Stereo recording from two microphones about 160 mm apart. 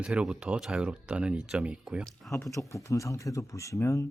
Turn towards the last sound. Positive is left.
turn(degrees=20)  # may be behind; listen again after turning